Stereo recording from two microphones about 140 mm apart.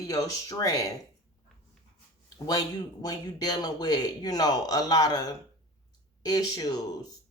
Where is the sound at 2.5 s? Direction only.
25° left (ahead or behind).